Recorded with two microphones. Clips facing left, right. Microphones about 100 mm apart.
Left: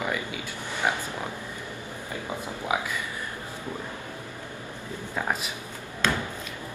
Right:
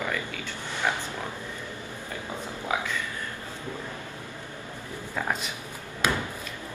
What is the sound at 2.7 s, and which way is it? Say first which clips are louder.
Speech: left 1 dB; 15° left (ahead or behind).